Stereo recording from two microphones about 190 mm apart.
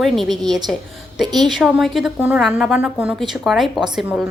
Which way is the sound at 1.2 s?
20° right (ahead or behind).